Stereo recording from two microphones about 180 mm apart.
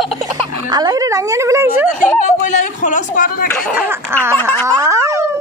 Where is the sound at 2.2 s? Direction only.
45° left (ahead or behind).